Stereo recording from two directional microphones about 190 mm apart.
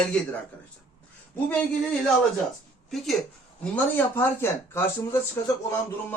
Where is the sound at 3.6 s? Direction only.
10° left (ahead or behind).